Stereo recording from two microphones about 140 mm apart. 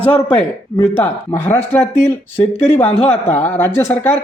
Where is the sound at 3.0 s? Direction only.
50° left (ahead or behind).